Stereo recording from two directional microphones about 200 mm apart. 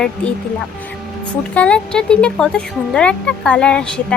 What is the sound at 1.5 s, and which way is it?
Speech, 5° left (ahead or behind).